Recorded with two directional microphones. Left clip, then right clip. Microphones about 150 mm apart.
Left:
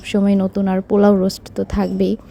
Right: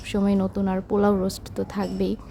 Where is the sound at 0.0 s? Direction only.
30° left (ahead or behind).